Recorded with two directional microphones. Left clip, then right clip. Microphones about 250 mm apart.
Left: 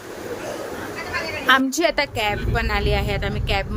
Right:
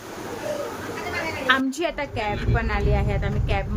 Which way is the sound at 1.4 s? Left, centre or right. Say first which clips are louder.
Left 5 dB; centre.